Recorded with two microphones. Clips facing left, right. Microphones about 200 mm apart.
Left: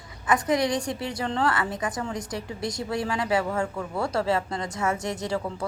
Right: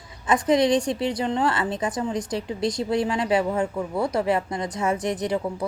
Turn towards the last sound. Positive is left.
turn(degrees=-20)  # may be behind; listen again after turning